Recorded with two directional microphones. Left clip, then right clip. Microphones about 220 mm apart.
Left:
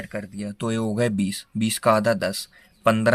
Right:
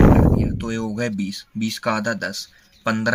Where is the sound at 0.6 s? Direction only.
40° left (ahead or behind).